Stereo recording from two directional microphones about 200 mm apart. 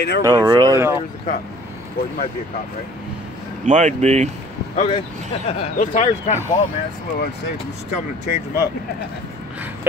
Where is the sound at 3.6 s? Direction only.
35° right (ahead or behind).